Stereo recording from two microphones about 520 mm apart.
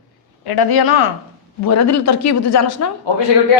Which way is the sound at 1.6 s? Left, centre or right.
Left.